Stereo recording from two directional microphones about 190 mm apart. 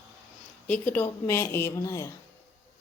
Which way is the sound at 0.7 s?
10° left (ahead or behind).